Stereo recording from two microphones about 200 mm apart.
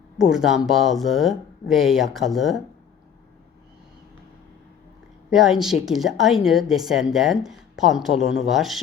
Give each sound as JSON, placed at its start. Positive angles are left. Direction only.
{"t": 0.2, "sound": "a woman's voice", "side_deg": 0}
{"t": 5.3, "sound": "a woman's voice", "side_deg": 0}